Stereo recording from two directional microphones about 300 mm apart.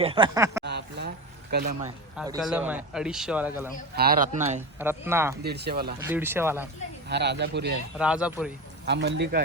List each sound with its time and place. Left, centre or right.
0.0 s speech: centre
0.6 s a sound: right
2.1 s a man's voice: centre
3.9 s a man's voice: right
4.8 s speech: centre
5.4 s speech: right
6.1 s speech: centre
7.1 s speech: right
7.9 s speech: centre
8.9 s speech: right